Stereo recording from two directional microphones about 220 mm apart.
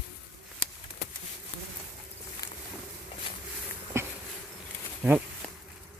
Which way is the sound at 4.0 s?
10° right (ahead or behind).